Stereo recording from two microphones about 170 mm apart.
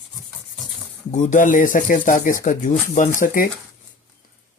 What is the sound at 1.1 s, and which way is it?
Speech, 45° left (ahead or behind).